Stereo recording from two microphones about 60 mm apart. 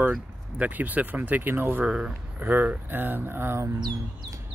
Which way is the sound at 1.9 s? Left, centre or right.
Centre.